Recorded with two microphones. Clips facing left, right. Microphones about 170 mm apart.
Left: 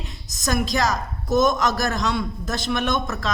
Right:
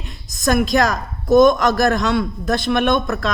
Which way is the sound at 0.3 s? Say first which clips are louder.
Right 7 dB; 60° right (ahead or behind).